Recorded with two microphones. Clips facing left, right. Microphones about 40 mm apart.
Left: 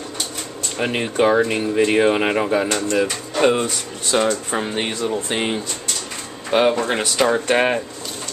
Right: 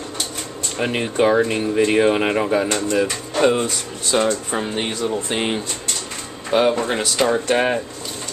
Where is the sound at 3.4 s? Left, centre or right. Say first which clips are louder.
Even; centre.